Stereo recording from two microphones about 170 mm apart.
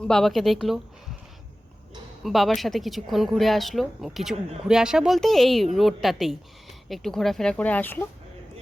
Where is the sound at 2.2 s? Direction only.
Centre (ahead or behind).